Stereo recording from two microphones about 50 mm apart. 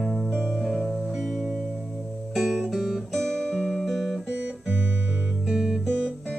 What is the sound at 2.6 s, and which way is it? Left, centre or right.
Guitar, centre.